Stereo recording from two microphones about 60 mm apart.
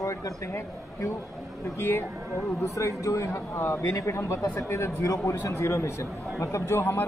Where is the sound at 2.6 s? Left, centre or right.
Left.